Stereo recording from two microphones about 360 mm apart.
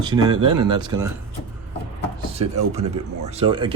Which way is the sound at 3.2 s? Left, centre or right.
Centre.